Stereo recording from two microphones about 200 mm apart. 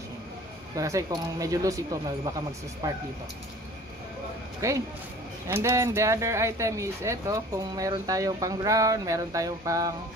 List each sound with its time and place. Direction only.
0.7 s speech: 15° right (ahead or behind)
4.6 s speech: 15° right (ahead or behind)